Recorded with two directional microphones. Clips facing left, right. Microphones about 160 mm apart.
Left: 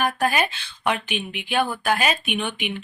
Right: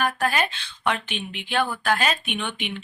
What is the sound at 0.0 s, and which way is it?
Speech, 15° left (ahead or behind).